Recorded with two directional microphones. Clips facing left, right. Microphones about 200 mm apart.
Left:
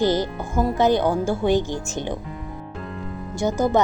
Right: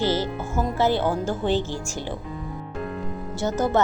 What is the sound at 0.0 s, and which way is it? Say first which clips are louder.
Speech: left 3 dB; 15° left (ahead or behind).